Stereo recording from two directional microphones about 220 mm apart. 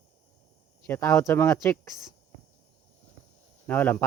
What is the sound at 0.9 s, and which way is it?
Speech, 10° left (ahead or behind).